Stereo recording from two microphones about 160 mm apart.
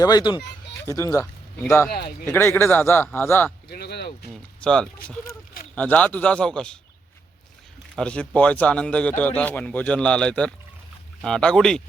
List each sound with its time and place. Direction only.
0.0 s speech: 25° left (ahead or behind)
1.9 s speech: 80° left
2.2 s a man's voice: 15° left (ahead or behind)
3.7 s speech: 85° left
4.3 s a man's voice: 5° left (ahead or behind)
7.9 s a man's voice: 5° left (ahead or behind)